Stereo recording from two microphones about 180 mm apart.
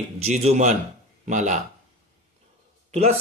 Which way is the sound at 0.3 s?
40° right (ahead or behind).